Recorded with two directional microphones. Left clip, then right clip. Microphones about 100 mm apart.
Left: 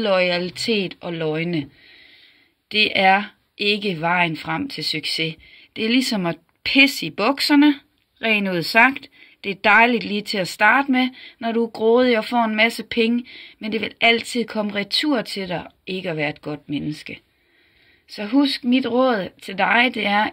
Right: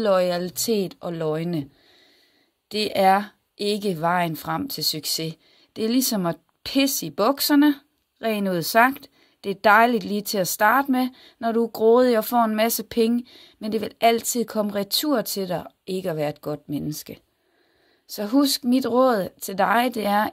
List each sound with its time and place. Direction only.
0.0 s speech: 20° right (ahead or behind)
2.9 s speech: 25° right (ahead or behind)